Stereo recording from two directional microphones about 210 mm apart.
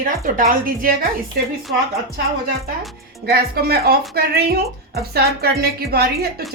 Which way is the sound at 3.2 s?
50° right (ahead or behind).